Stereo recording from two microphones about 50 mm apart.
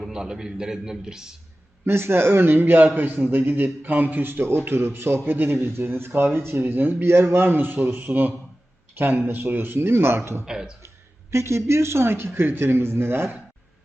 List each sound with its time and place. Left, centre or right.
0.1 s a man's voice: centre
1.8 s speech: right
9.7 s speech: right
10.4 s a man's voice: centre
11.3 s speech: right